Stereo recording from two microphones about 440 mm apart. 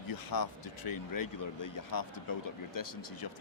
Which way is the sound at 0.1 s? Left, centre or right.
Left.